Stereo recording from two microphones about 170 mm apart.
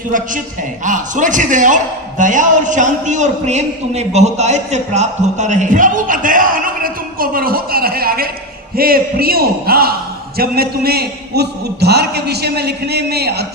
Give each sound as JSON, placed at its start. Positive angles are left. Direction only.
{"t": 0.9, "sound": "a man's voice", "side_deg": -50}